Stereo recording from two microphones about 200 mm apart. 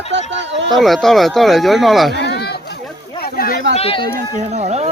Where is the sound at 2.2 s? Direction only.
55° left (ahead or behind).